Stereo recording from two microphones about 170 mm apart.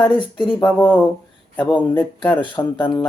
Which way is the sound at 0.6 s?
10° left (ahead or behind).